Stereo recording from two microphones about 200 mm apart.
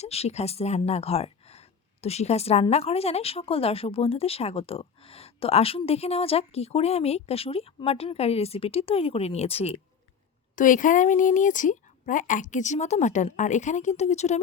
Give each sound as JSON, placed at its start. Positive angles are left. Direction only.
{"t": 0.0, "sound": "speech", "side_deg": 30}
{"t": 10.5, "sound": "speech", "side_deg": 40}